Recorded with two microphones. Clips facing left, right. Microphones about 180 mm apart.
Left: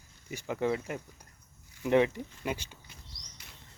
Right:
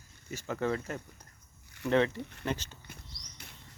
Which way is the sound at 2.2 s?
65° right (ahead or behind).